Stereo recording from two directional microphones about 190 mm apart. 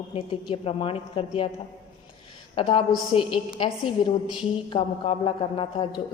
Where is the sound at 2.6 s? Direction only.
30° left (ahead or behind).